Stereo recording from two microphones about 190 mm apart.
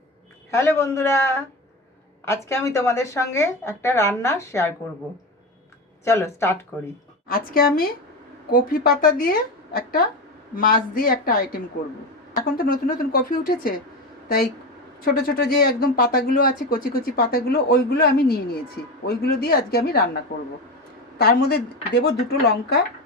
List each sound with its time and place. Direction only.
0.5 s speech: 15° left (ahead or behind)
6.1 s speech: 15° left (ahead or behind)
7.3 s speech: 50° left (ahead or behind)
15.0 s a woman's voice: 50° left (ahead or behind)